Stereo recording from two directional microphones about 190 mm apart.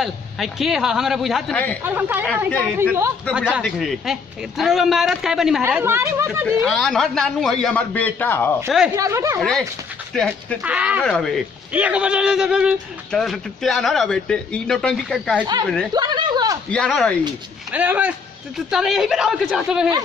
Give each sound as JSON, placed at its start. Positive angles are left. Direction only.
{"t": 0.0, "sound": "a man's voice", "side_deg": 0}
{"t": 1.8, "sound": "a woman's voice", "side_deg": -10}
{"t": 6.7, "sound": "a man's voice", "side_deg": 5}
{"t": 8.6, "sound": "a man's voice", "side_deg": 0}
{"t": 8.9, "sound": "a woman's voice", "side_deg": -15}
{"t": 9.4, "sound": "a man's voice", "side_deg": 0}
{"t": 10.6, "sound": "a woman's voice", "side_deg": -5}
{"t": 15.9, "sound": "a sound", "side_deg": -20}
{"t": 16.7, "sound": "a man's voice", "side_deg": 5}
{"t": 17.6, "sound": "a man's voice", "side_deg": -10}